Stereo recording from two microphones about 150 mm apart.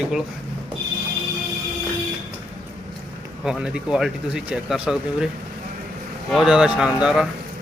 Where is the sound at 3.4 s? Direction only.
5° right (ahead or behind).